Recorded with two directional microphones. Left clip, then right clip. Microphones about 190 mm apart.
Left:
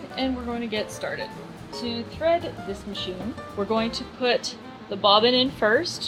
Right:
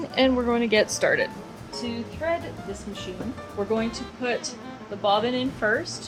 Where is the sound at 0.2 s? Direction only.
40° right (ahead or behind).